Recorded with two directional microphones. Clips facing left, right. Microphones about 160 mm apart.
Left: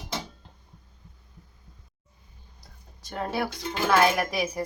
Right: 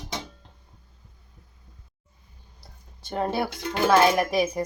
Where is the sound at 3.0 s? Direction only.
30° right (ahead or behind).